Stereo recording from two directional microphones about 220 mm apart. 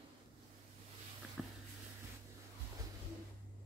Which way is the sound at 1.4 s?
Centre (ahead or behind).